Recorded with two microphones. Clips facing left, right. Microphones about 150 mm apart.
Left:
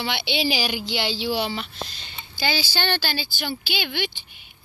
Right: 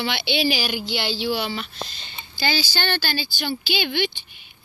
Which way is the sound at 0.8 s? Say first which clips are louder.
Right 1 dB; 90° left.